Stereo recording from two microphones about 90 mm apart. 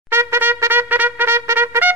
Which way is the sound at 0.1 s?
25° right (ahead or behind).